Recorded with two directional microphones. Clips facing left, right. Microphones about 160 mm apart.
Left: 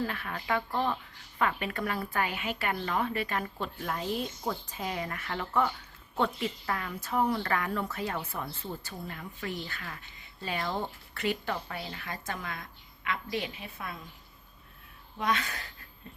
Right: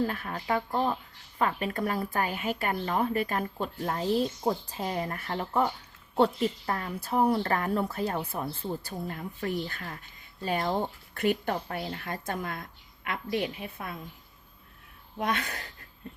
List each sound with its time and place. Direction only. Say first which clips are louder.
0.0 s speech: right 4 dB; 40° right (ahead or behind)
0.3 s speech: right 2 dB; 25° right (ahead or behind)
1.4 s speech: right 2 dB; 35° right (ahead or behind)
3.8 s speech: right 6 dB; 30° right (ahead or behind)
10.7 s speech: right 4 dB; 25° right (ahead or behind)
11.1 s a woman's voice: right 5 dB; 50° right (ahead or behind)
15.2 s a woman's voice: even; 50° right (ahead or behind)